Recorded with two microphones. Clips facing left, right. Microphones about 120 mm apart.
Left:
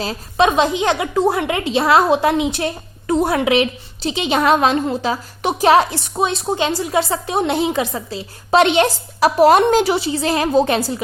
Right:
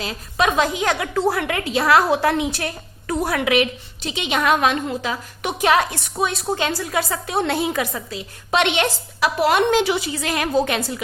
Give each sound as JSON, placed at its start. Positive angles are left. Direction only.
{"t": 0.0, "sound": "a woman's voice", "side_deg": 30}